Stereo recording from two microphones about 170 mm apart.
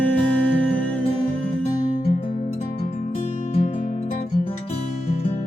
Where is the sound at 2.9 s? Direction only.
40° left (ahead or behind).